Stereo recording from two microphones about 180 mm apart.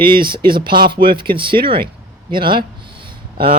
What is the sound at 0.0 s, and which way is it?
Speech, 25° right (ahead or behind).